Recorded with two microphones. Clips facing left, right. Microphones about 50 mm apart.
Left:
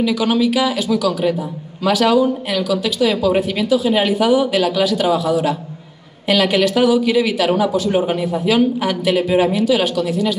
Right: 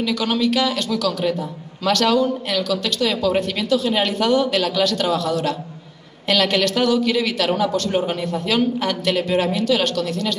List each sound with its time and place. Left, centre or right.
0.0 s speech: centre